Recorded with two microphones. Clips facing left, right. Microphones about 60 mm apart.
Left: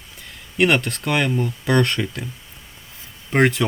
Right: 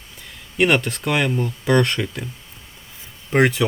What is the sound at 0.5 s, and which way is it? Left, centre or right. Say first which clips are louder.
Speech: even; centre.